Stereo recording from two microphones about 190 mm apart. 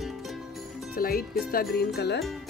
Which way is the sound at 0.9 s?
50° left (ahead or behind).